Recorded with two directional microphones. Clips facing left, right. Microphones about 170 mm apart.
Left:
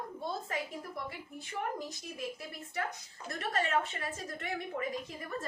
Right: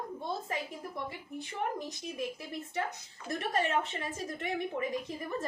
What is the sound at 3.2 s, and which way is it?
A woman's voice, 20° right (ahead or behind).